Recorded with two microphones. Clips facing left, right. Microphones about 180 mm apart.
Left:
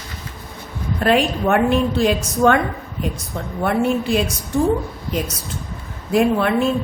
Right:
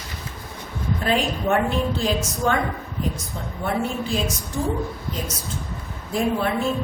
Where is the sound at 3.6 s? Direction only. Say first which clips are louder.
Left 6 dB; 70° left (ahead or behind).